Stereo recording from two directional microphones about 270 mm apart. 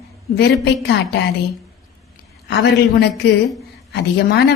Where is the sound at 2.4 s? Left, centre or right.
Left.